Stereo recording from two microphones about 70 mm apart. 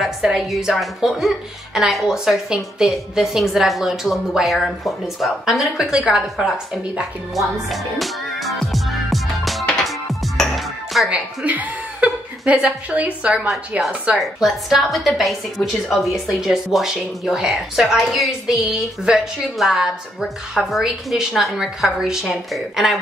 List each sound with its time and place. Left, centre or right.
0.0 s a woman's voice: centre
7.7 s music: centre
11.1 s chuckle: right
13.5 s a woman's voice: centre